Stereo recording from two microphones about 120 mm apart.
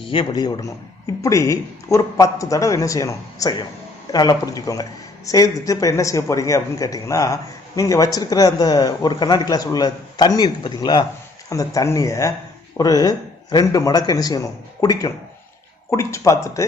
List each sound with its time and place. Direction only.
0.0 s a man's voice: 45° left (ahead or behind); by 16.6 s 25° left (ahead or behind)